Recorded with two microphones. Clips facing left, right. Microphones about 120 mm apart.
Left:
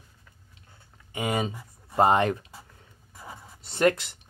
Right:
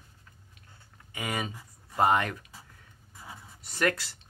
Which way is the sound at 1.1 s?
25° left (ahead or behind).